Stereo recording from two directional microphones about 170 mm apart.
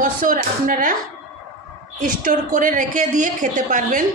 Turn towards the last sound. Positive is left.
turn(degrees=-50)  # may be behind; listen again after turning